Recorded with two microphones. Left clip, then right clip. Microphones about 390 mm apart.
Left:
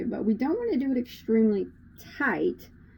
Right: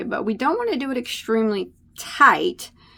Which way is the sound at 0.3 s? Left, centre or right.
Right.